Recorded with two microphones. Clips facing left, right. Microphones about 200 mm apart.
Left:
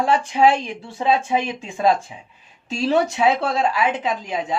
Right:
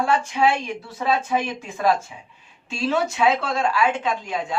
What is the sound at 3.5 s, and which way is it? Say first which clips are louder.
Speech: left 1 dB; 20° left (ahead or behind).